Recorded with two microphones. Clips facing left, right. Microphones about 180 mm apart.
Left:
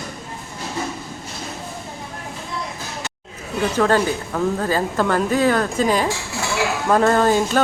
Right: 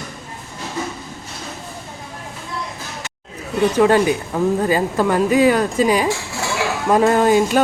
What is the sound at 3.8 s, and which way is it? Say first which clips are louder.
Speech: right 3 dB; 15° right (ahead or behind).